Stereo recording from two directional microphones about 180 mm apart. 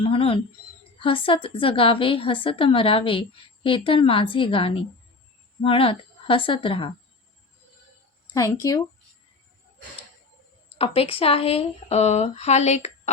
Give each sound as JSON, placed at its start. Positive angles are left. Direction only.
{"t": 0.0, "sound": "a woman's voice", "side_deg": 30}
{"t": 8.5, "sound": "a woman's voice", "side_deg": 20}
{"t": 10.8, "sound": "speech", "side_deg": 30}